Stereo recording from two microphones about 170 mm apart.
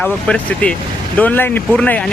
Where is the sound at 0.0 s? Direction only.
5° left (ahead or behind).